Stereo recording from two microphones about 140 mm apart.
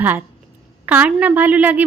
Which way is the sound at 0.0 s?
10° right (ahead or behind).